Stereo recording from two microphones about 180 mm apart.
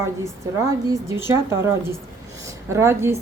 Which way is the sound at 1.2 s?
15° right (ahead or behind).